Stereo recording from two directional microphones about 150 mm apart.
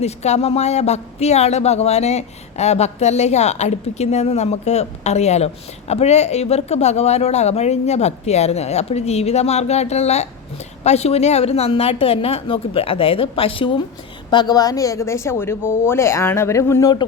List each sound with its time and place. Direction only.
0.0 s a woman's voice: 45° left (ahead or behind); by 17.1 s 25° left (ahead or behind)